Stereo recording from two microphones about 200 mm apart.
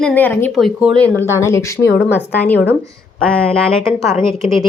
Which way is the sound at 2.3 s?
10° left (ahead or behind).